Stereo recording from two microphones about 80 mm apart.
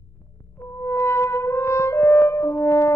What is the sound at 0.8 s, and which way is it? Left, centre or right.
Music, left.